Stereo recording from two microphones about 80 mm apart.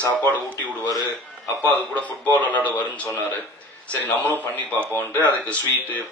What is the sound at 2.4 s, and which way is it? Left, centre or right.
A man's voice, centre.